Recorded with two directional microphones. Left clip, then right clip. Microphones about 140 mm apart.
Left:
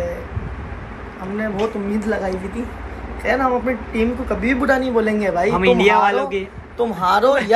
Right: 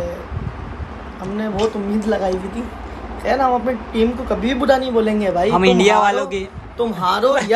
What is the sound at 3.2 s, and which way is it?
Speech, 20° right (ahead or behind).